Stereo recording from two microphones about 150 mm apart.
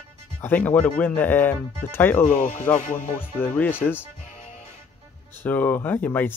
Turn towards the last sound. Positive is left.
turn(degrees=10)  # may be behind; listen again after turning